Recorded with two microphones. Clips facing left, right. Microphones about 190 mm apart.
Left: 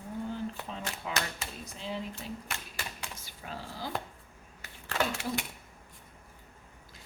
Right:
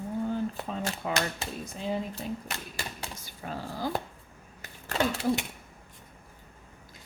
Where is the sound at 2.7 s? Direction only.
40° right (ahead or behind).